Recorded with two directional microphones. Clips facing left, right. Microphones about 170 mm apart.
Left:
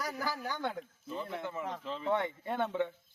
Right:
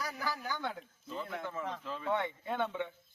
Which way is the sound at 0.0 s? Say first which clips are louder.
Left 2 dB; 40° left (ahead or behind).